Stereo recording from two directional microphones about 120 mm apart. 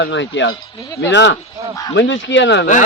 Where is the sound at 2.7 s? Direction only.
90° left.